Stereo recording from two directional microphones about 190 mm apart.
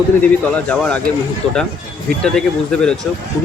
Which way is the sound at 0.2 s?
5° left (ahead or behind).